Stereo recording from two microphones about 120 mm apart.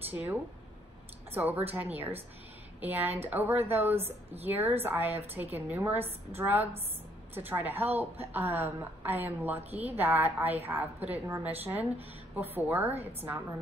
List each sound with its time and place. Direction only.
1.3 s a woman's voice: 15° right (ahead or behind)